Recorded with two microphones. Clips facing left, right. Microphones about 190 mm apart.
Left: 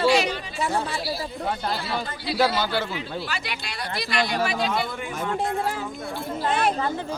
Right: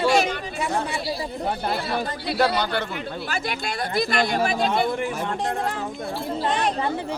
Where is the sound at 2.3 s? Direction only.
5° left (ahead or behind).